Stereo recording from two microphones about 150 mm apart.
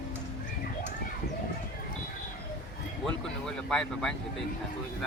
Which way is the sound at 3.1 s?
5° left (ahead or behind).